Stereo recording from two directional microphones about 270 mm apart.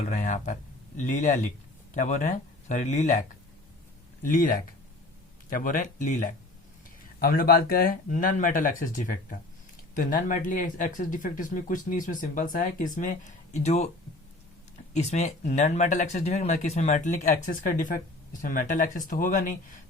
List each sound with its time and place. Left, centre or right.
0.0 s speech: left
14.9 s speech: left